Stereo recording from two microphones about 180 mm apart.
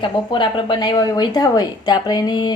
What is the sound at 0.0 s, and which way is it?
A woman's voice, 25° left (ahead or behind).